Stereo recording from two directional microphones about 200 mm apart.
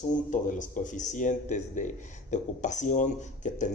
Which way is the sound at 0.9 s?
40° left (ahead or behind).